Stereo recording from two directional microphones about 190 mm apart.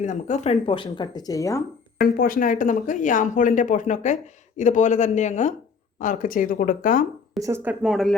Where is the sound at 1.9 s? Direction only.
50° left (ahead or behind).